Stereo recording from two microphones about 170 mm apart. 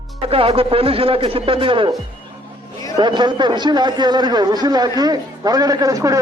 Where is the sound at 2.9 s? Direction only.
25° right (ahead or behind).